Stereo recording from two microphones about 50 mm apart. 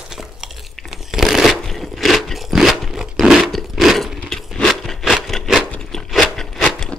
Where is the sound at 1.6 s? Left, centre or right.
Centre.